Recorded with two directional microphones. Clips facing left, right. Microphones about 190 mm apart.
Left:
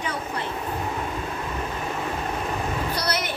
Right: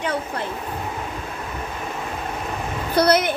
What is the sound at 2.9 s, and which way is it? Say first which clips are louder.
Speech: right 10 dB; 55° right (ahead or behind).